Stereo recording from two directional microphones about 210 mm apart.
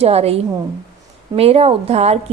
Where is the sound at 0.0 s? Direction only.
30° right (ahead or behind).